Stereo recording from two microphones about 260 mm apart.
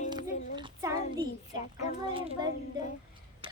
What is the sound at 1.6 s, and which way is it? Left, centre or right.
Speech, left.